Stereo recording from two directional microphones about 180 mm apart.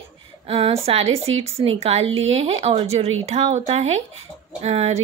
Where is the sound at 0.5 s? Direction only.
30° right (ahead or behind).